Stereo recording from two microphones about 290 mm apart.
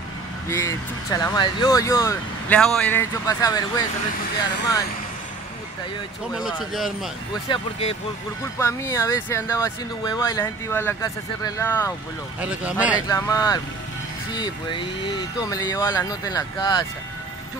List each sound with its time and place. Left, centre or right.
0.5 s speech: centre
6.3 s speech: centre
7.4 s speech: centre
12.4 s speech: centre
13.1 s speech: centre